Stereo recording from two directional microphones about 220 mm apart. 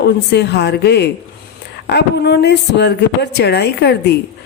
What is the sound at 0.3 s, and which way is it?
Speech, 50° left (ahead or behind).